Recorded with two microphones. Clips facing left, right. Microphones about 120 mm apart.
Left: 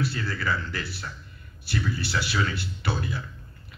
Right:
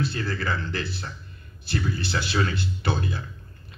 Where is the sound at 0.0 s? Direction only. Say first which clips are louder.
Right 1 dB; 25° right (ahead or behind).